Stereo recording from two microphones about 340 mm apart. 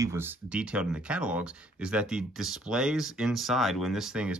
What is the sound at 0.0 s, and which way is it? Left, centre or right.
Speech, centre.